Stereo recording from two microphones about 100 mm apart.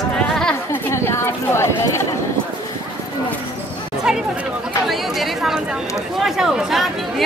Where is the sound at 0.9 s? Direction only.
25° left (ahead or behind).